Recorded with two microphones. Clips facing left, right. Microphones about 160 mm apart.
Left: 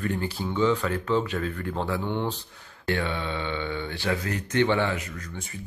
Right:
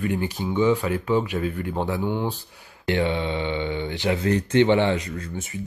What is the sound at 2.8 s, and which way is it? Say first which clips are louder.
Speech: right 5 dB; 20° right (ahead or behind).